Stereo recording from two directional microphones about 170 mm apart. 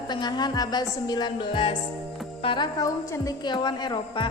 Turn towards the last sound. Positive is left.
turn(degrees=25)  # may be behind; listen again after turning